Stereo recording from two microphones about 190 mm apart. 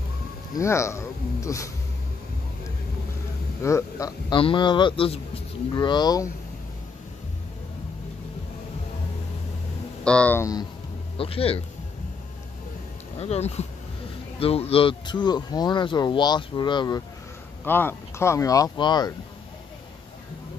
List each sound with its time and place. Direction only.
0.6 s speech: 15° left (ahead or behind)
3.6 s speech: 15° left (ahead or behind)
10.0 s speech: 5° left (ahead or behind)
11.1 s speech: 30° left (ahead or behind)
13.2 s speech: 35° left (ahead or behind)
17.6 s speech: 10° left (ahead or behind)